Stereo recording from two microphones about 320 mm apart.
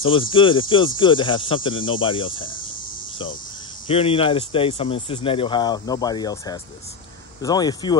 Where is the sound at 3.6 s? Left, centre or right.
Centre.